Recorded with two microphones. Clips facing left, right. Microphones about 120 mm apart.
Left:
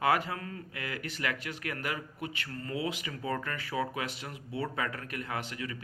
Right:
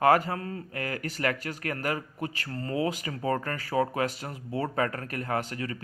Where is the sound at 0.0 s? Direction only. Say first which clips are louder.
Right 6 dB; 40° right (ahead or behind).